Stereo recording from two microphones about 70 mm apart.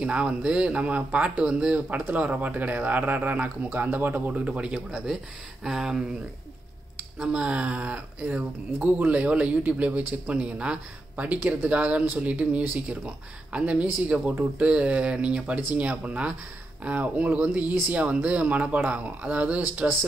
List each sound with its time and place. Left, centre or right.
0.0 s speech: centre
7.2 s speech: centre